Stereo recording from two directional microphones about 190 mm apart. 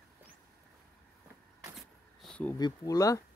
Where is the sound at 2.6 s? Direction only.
20° left (ahead or behind).